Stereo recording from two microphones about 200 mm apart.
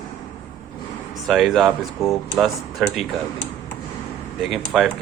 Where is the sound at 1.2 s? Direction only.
Centre (ahead or behind).